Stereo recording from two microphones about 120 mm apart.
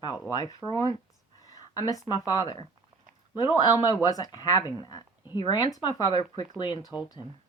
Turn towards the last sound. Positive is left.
turn(degrees=40)  # may be behind; listen again after turning